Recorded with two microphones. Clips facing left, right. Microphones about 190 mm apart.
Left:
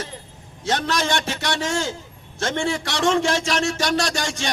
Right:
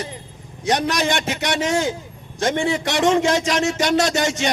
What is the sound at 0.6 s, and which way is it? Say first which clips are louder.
A man's voice: right 3 dB; 15° right (ahead or behind).